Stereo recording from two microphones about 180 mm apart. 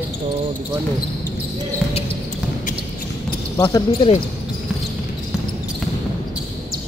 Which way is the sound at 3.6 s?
30° left (ahead or behind).